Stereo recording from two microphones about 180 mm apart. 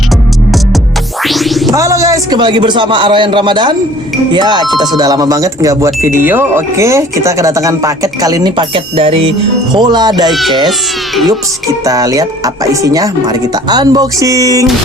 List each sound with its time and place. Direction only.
1.2 s music: centre (ahead or behind)
1.7 s a man's voice: 20° right (ahead or behind)
10.2 s speech: centre (ahead or behind)
11.9 s a man's voice: 20° right (ahead or behind)